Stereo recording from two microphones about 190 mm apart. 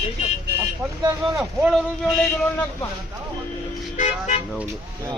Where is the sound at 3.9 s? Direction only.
40° left (ahead or behind).